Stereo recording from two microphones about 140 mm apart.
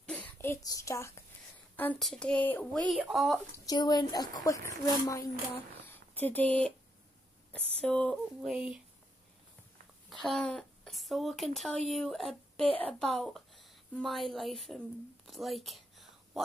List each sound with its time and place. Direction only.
0.0 s speech: 10° left (ahead or behind)
2.0 s speech: 5° left (ahead or behind)
2.9 s a woman's voice: centre (ahead or behind)
3.6 s speech: 30° left (ahead or behind)
5.5 s speech: 15° left (ahead or behind)
8.4 s speech: 5° right (ahead or behind)
10.2 s a woman's voice: 5° left (ahead or behind)
15.2 s whispering: centre (ahead or behind)